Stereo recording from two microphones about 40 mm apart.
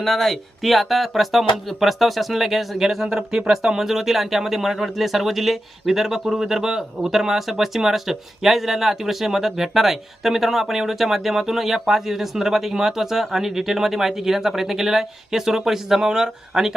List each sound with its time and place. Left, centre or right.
0.0 s speech: centre
3.1 s speech: right
3.5 s speech: centre